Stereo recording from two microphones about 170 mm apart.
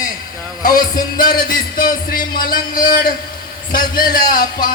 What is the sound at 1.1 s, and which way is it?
Music, 55° left (ahead or behind).